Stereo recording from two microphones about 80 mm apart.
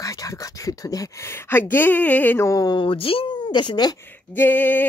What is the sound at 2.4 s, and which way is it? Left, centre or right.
Speech, left.